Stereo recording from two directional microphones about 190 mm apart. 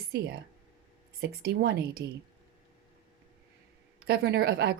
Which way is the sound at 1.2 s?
55° right (ahead or behind).